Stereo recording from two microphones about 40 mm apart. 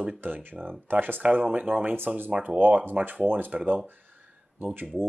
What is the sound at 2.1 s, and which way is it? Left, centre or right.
Speech, right.